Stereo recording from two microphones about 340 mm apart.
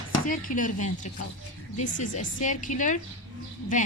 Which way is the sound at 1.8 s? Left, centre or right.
Left.